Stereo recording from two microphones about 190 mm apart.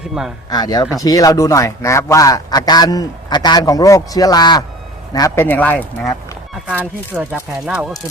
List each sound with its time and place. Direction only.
0.5 s a man's voice: 20° left (ahead or behind)
6.7 s speech: 10° right (ahead or behind)